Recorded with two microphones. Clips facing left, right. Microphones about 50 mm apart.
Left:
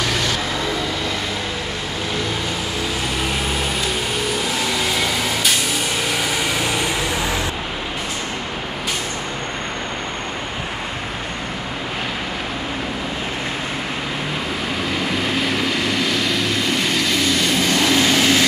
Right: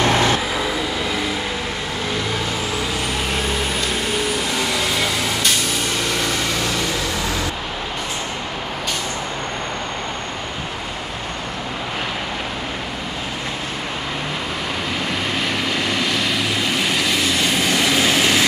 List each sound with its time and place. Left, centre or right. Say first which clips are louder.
0.0 s vehicle: right 5 dB; right
4.5 s vacuum cleaner: even; centre
6.2 s vehicle: left 1 dB; centre
15.0 s vehicle: left 2 dB; centre